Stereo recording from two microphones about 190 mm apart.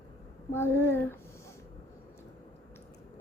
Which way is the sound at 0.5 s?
10° left (ahead or behind).